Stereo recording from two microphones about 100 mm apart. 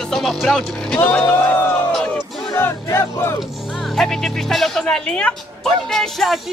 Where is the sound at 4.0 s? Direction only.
Centre (ahead or behind).